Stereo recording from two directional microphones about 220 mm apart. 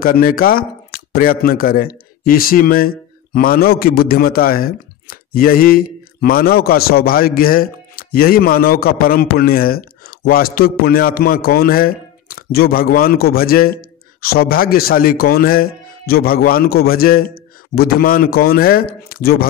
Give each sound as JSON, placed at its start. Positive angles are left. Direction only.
{"t": 0.0, "sound": "speech", "side_deg": 40}